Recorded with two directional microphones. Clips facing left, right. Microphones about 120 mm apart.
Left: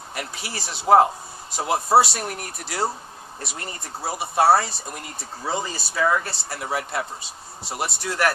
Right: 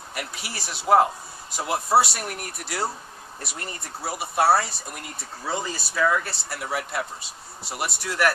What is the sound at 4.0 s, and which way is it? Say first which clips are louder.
Speech: left 3 dB; 25° left (ahead or behind).